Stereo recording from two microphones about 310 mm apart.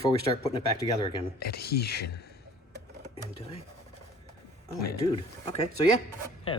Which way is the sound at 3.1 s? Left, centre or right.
Centre.